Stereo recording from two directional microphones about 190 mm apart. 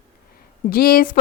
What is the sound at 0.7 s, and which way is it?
Speech, 50° left (ahead or behind).